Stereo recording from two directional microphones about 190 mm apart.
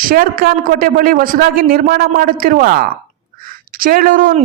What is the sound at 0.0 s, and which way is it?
A woman's voice, 50° right (ahead or behind).